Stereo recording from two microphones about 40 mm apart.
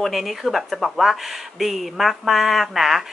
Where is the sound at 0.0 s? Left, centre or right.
Centre.